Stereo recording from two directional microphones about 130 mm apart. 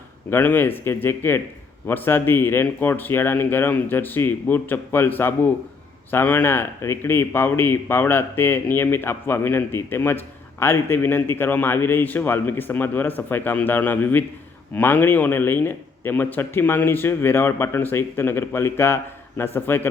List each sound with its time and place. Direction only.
0.3 s speech: 15° left (ahead or behind)